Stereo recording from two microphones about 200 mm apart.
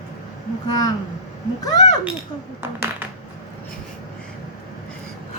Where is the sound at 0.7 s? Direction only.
20° left (ahead or behind).